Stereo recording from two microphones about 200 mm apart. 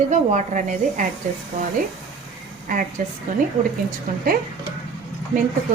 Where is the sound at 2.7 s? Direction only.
40° right (ahead or behind).